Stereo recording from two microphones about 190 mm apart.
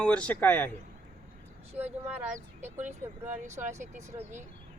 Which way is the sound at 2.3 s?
40° right (ahead or behind).